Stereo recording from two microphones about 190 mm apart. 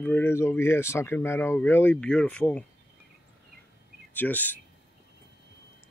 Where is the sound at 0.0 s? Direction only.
10° left (ahead or behind).